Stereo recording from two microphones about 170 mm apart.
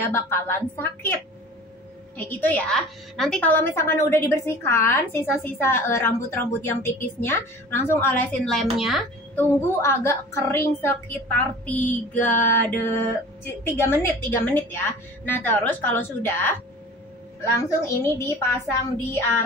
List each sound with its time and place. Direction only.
0.0 s a woman's voice: 15° left (ahead or behind)
2.1 s a woman's voice: 10° left (ahead or behind)
8.7 s speech: centre (ahead or behind)
9.3 s a woman's voice: 15° left (ahead or behind)
14.2 s a woman's voice: 15° left (ahead or behind)